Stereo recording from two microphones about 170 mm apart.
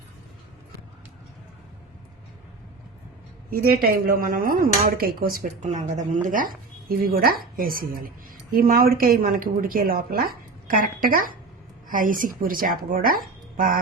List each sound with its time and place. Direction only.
3.5 s speech: 60° right (ahead or behind)